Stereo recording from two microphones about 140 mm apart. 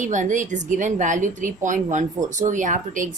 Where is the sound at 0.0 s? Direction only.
60° right (ahead or behind).